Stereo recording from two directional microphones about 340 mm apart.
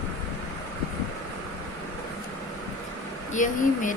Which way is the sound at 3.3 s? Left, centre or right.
Left.